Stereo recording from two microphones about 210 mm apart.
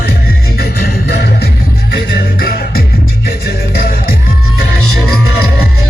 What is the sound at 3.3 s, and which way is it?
Music, 45° left (ahead or behind).